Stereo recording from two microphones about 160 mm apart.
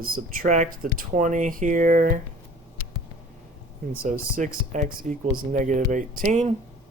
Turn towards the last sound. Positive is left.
turn(degrees=-50)  # may be behind; listen again after turning